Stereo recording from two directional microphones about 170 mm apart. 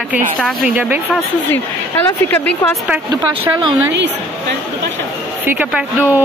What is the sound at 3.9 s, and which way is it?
Speech, 90° right.